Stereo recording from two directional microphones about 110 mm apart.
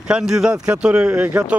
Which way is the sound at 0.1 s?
5° right (ahead or behind).